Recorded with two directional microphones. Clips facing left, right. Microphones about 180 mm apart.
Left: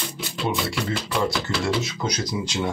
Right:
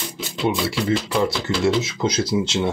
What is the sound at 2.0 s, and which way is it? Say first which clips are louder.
Speech: right 6 dB; 25° right (ahead or behind).